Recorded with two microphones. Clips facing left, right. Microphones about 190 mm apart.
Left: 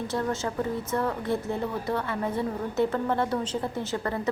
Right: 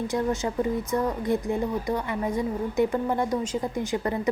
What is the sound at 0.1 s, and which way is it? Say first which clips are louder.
A woman's voice: right 3 dB; 15° right (ahead or behind).